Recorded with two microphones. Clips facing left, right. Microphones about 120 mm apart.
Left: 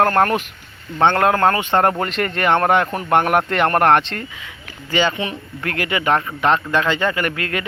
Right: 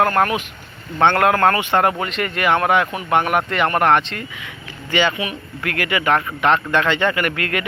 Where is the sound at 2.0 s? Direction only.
40° left (ahead or behind).